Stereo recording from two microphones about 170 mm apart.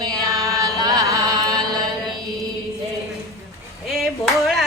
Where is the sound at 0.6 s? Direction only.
20° right (ahead or behind).